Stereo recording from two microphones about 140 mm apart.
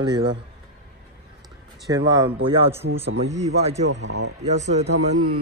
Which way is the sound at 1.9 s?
25° right (ahead or behind).